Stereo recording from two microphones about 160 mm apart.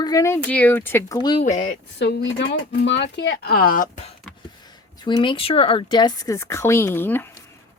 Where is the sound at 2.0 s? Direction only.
90° left; by 4.1 s 50° left (ahead or behind).